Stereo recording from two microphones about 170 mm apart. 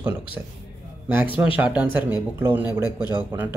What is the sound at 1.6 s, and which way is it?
Speech, 10° right (ahead or behind).